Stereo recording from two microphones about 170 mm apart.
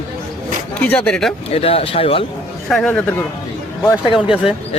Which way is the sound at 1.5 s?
35° left (ahead or behind).